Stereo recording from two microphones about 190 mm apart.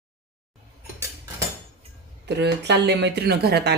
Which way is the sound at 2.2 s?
65° right (ahead or behind).